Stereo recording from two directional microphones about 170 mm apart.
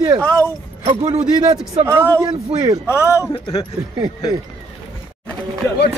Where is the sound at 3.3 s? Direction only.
25° left (ahead or behind).